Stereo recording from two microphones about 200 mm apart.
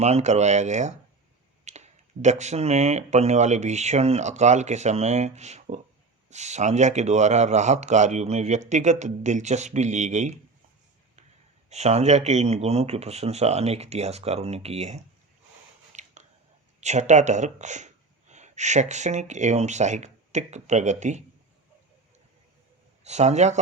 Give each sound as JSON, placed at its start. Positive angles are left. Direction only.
{"t": 0.0, "sound": "speech", "side_deg": -35}
{"t": 11.7, "sound": "speech", "side_deg": -35}
{"t": 15.9, "sound": "a sound", "side_deg": -35}
{"t": 16.8, "sound": "speech", "side_deg": -35}
{"t": 23.0, "sound": "speech", "side_deg": -35}